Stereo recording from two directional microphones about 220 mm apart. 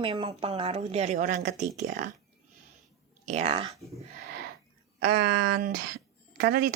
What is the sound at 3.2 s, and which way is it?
Speech, 30° right (ahead or behind).